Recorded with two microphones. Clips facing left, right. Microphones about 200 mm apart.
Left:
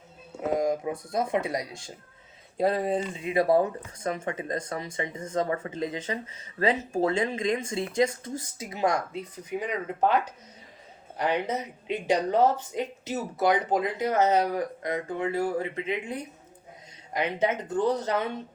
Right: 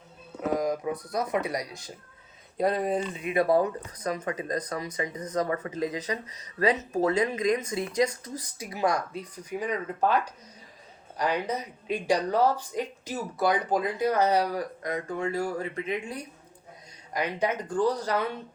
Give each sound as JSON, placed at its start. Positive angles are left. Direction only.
{"t": 0.4, "sound": "speech", "side_deg": 25}